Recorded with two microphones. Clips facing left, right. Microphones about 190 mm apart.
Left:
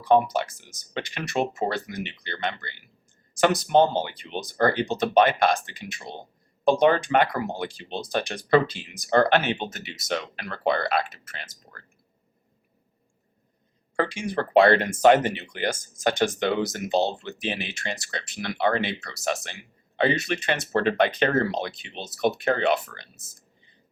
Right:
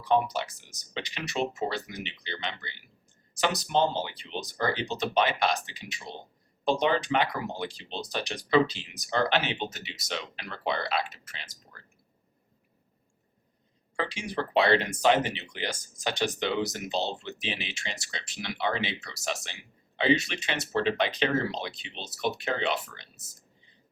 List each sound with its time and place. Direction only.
0.0 s speech: 50° left (ahead or behind)
13.9 s speech: 50° left (ahead or behind)